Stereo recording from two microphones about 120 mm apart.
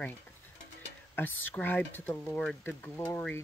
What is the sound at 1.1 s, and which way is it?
Speech, 15° left (ahead or behind).